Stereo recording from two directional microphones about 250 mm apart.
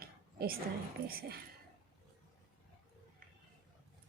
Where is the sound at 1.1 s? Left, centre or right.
Right.